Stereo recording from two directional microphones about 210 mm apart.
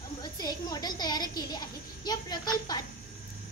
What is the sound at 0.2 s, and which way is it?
A woman's voice, 20° left (ahead or behind).